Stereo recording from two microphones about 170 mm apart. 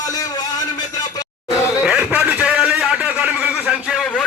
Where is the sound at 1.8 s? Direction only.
5° right (ahead or behind).